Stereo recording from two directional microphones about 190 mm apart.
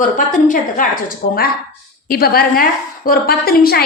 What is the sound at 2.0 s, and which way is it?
A woman's voice, 50° left (ahead or behind).